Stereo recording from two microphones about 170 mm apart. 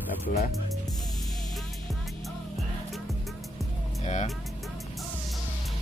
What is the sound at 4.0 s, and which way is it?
Speech, 40° left (ahead or behind).